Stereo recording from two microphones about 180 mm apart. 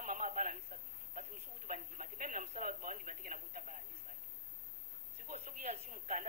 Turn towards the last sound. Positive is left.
turn(degrees=-45)  # may be behind; listen again after turning